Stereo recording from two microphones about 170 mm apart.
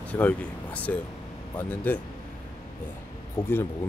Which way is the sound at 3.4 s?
15° left (ahead or behind).